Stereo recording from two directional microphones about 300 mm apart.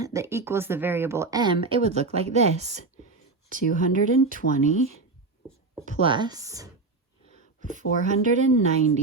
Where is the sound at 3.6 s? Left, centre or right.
Left.